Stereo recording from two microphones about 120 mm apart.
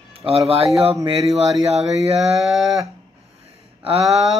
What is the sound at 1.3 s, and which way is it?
Speech, 60° right (ahead or behind).